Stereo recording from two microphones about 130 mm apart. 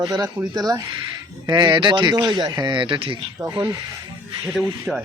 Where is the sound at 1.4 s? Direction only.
35° right (ahead or behind).